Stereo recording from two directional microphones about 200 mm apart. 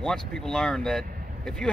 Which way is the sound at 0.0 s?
5° left (ahead or behind).